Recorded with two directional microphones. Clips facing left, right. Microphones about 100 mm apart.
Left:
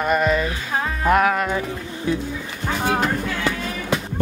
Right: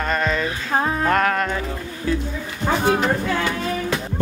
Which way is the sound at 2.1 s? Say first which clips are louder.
Even; 20° left (ahead or behind).